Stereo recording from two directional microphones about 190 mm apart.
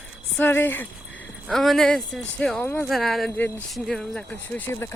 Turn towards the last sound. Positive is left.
turn(degrees=10)  # may be behind; listen again after turning